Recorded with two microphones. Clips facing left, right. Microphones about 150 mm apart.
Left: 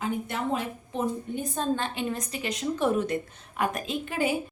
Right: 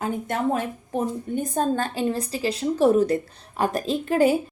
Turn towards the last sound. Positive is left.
turn(degrees=-40)  # may be behind; listen again after turning